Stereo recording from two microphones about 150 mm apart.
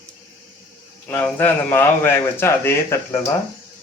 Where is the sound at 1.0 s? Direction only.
15° left (ahead or behind).